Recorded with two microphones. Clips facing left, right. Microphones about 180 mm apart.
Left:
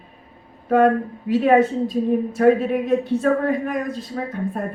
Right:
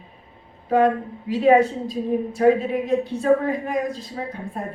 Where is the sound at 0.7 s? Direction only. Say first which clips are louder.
Left 2 dB; 50° left (ahead or behind).